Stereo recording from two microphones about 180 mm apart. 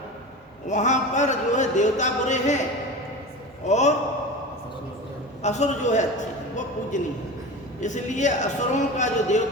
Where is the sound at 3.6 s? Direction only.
40° left (ahead or behind).